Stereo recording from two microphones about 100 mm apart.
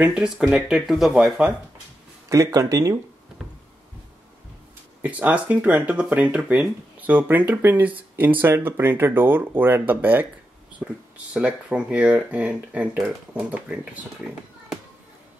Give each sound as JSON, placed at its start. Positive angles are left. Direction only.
{"t": 0.0, "sound": "speech", "side_deg": -10}
{"t": 2.2, "sound": "speech", "side_deg": -35}
{"t": 5.0, "sound": "speech", "side_deg": -15}
{"t": 11.3, "sound": "a child's voice", "side_deg": -10}